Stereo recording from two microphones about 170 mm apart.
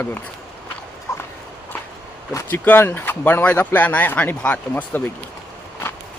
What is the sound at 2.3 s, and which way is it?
Speech, 10° left (ahead or behind).